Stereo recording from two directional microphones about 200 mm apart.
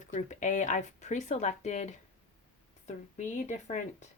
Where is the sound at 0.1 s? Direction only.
35° left (ahead or behind).